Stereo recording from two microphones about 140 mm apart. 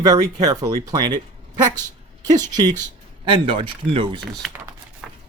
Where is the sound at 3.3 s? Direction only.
35° right (ahead or behind).